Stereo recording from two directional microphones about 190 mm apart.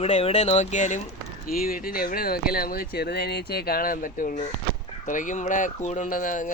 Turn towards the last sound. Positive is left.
turn(degrees=45)  # may be behind; listen again after turning